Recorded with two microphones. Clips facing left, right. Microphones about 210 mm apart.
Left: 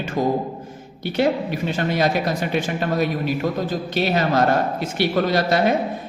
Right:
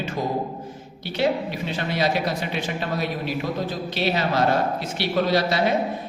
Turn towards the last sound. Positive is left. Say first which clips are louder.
# left 2 dB
turn(degrees=50)  # may be behind; listen again after turning